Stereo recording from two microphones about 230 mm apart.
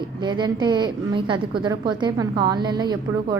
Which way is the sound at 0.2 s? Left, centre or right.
Centre.